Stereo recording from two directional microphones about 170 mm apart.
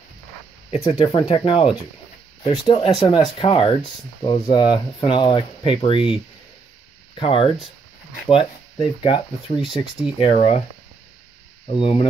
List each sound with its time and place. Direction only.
0.7 s speech: 35° left (ahead or behind)
7.2 s speech: 30° left (ahead or behind)
11.7 s speech: 35° left (ahead or behind)